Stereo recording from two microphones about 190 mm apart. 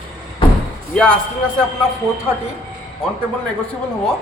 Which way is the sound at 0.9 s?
5° left (ahead or behind).